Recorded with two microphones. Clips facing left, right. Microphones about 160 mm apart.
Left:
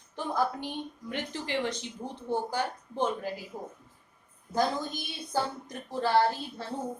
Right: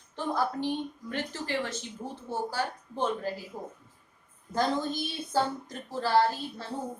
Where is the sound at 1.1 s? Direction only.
20° left (ahead or behind).